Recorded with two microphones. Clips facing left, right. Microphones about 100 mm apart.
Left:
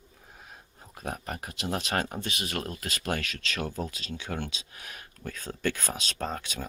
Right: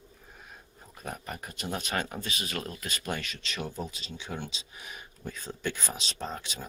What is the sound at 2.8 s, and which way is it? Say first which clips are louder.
Speech: left 3 dB; 85° left.